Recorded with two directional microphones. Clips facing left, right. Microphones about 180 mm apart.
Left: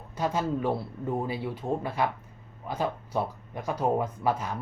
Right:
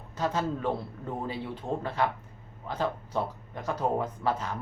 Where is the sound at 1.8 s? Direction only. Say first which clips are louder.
Even; 10° left (ahead or behind).